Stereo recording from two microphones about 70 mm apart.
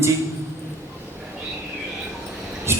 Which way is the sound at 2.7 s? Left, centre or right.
Right.